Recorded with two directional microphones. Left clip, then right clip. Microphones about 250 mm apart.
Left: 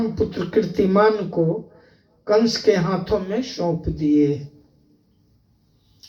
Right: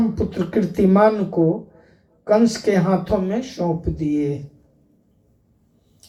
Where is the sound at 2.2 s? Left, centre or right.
Right.